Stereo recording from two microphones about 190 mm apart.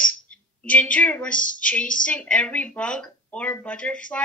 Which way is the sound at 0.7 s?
5° left (ahead or behind).